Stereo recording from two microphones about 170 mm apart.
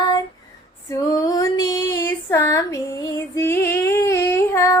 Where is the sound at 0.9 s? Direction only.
20° left (ahead or behind).